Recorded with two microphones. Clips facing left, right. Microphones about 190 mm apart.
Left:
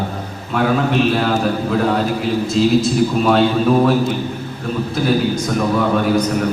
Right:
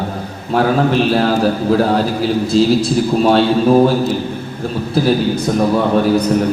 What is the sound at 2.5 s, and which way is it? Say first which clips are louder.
A man's voice: right 1 dB; 35° right (ahead or behind).